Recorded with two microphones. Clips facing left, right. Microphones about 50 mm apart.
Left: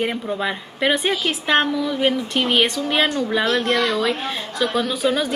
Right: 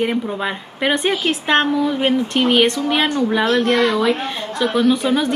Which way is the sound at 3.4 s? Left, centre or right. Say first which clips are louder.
Right 4 dB; right.